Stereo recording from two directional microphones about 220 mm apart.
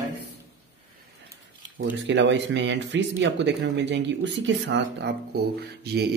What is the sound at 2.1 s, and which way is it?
Speech, 55° right (ahead or behind).